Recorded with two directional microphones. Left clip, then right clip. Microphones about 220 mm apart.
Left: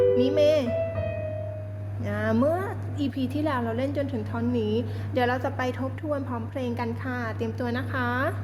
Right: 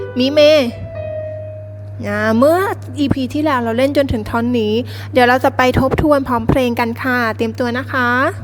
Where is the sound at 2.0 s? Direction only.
35° right (ahead or behind).